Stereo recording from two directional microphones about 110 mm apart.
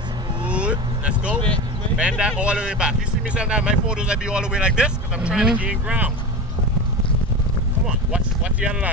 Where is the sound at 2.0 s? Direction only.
10° right (ahead or behind).